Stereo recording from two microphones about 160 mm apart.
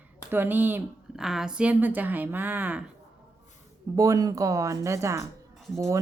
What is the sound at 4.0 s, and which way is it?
Speech, 20° right (ahead or behind).